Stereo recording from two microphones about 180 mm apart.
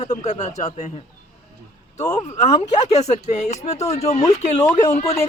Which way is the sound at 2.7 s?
40° left (ahead or behind).